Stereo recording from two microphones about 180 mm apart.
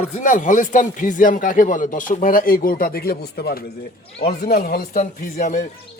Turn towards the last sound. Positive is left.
turn(degrees=45)  # may be behind; listen again after turning